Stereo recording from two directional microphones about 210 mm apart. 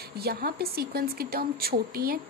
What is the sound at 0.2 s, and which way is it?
Speech, 45° right (ahead or behind).